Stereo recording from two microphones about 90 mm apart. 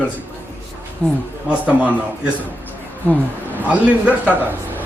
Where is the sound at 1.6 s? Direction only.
15° right (ahead or behind).